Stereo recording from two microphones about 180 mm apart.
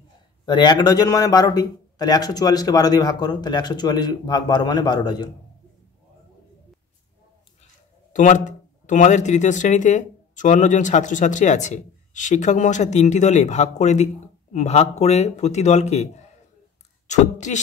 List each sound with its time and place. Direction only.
0.5 s a man's voice: 25° left (ahead or behind)
8.1 s speech: 45° left (ahead or behind)
17.1 s speech: 40° left (ahead or behind)